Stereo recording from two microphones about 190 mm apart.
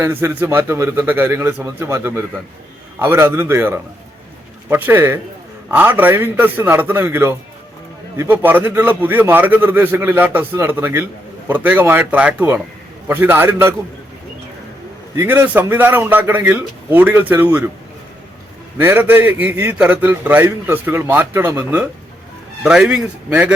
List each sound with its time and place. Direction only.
0.0 s a man's voice: 15° right (ahead or behind)
15.1 s a man's voice: 10° right (ahead or behind)
18.8 s a man's voice: 10° right (ahead or behind)